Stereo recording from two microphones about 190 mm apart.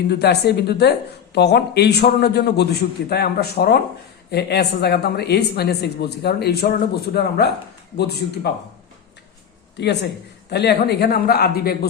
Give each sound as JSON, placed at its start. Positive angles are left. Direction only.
{"t": 0.1, "sound": "speech", "side_deg": 60}
{"t": 9.7, "sound": "speech", "side_deg": 60}